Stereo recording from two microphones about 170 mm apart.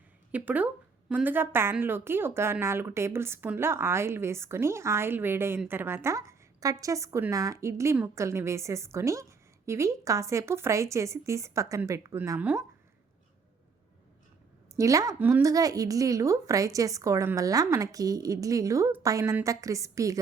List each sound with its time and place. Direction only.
0.3 s speech: 10° right (ahead or behind)
14.8 s speech: 20° right (ahead or behind)